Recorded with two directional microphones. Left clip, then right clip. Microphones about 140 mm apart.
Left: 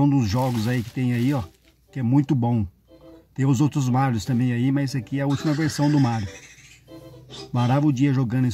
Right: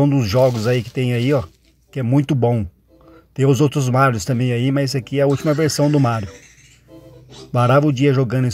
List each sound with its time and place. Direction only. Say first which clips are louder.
0.0 s speech: right 7 dB; 15° right (ahead or behind)
7.5 s speech: right 8 dB; 20° right (ahead or behind)